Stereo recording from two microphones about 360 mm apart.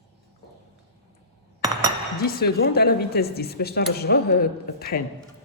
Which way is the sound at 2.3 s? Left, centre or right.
Left.